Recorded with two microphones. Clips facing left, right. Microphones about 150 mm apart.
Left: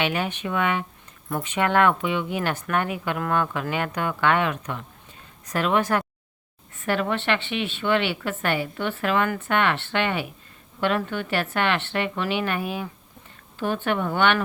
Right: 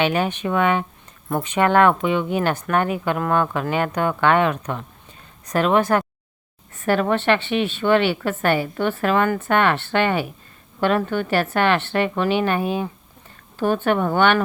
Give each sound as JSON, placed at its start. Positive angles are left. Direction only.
{"t": 0.0, "sound": "a woman's voice", "side_deg": -40}
{"t": 13.6, "sound": "a woman's voice", "side_deg": -45}